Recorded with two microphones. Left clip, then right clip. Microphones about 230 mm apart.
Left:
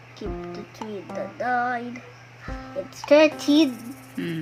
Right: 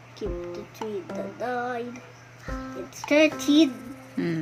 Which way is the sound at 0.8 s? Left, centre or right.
Centre.